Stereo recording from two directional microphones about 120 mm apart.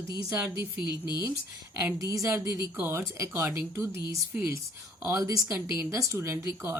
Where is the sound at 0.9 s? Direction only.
35° left (ahead or behind).